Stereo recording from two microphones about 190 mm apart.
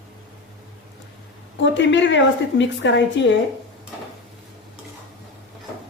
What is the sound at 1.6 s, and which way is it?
A woman's voice, 70° left (ahead or behind).